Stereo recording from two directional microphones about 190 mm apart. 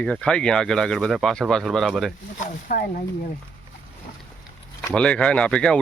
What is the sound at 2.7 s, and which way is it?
Speech, 50° left (ahead or behind).